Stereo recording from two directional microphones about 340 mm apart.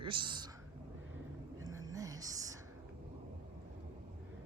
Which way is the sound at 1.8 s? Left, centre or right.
Centre.